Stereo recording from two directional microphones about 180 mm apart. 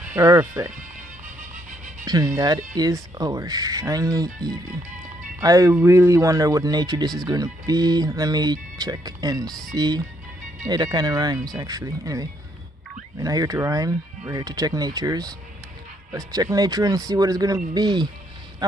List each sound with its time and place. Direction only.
0.0 s speech: 15° right (ahead or behind)
2.0 s speech: 20° right (ahead or behind)
5.4 s speech: 20° right (ahead or behind)
18.6 s quack: 20° right (ahead or behind)